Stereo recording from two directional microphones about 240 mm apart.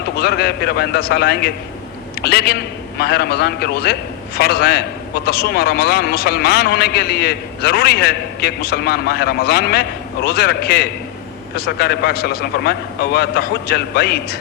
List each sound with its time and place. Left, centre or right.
0.2 s a man's voice: left